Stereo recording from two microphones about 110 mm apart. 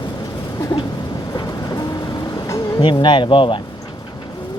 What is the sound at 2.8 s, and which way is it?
Speech, 45° left (ahead or behind).